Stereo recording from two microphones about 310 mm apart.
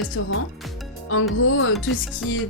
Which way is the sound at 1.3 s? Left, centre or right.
Left.